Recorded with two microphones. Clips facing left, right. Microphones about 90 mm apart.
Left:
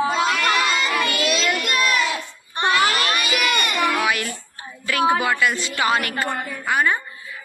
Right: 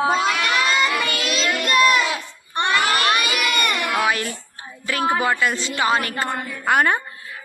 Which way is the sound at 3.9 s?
30° right (ahead or behind).